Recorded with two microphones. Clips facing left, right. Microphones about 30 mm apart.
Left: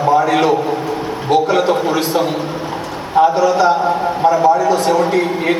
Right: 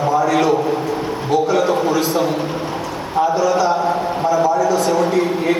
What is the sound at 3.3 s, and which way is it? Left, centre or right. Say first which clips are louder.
A man's voice: left 3 dB; left.